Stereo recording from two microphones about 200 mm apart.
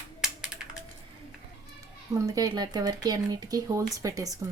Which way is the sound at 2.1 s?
15° right (ahead or behind).